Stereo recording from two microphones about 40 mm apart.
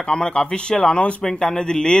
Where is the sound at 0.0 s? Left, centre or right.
Left.